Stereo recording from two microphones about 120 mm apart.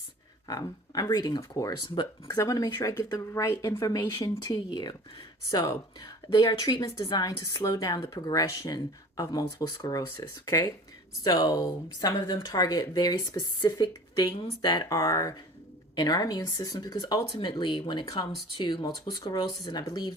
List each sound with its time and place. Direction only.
0.4 s speech: 30° left (ahead or behind)
2.0 s speech: 40° left (ahead or behind)
2.4 s speech: 30° left (ahead or behind)